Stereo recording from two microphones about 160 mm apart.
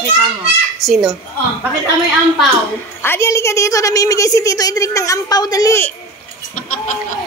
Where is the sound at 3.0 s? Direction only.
15° left (ahead or behind).